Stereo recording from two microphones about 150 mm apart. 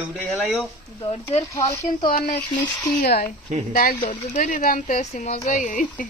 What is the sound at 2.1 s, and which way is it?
Speech, 75° left (ahead or behind).